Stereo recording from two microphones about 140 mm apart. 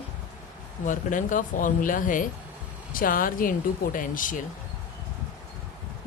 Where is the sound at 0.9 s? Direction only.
65° left (ahead or behind).